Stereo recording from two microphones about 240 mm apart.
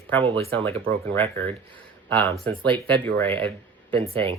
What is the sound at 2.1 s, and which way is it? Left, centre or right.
Speech, centre.